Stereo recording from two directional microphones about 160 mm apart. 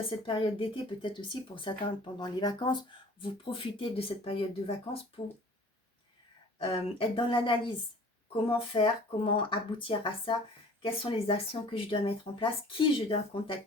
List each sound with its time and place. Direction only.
0.3 s speech: 35° left (ahead or behind)
6.6 s speech: 35° left (ahead or behind)